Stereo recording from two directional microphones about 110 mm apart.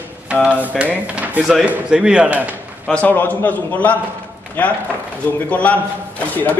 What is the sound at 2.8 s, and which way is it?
A man's voice, 10° left (ahead or behind).